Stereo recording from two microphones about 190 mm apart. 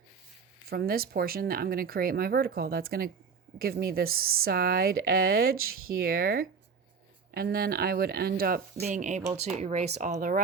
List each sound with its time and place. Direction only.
0.7 s speech: 50° right (ahead or behind)
5.5 s speech: 90° right
6.0 s speech: 50° right (ahead or behind)
8.8 s speech: 40° right (ahead or behind)